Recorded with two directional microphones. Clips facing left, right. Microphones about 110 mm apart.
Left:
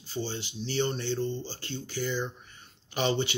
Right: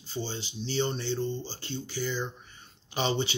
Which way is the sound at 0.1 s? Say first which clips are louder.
Left 1 dB; 25° right (ahead or behind).